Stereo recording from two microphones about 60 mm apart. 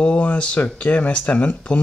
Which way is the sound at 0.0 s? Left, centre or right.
Left.